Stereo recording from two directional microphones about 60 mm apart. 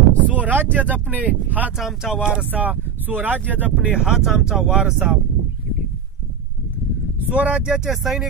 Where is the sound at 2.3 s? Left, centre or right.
Right.